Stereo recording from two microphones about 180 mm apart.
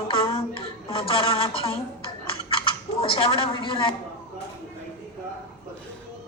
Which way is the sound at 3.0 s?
30° left (ahead or behind).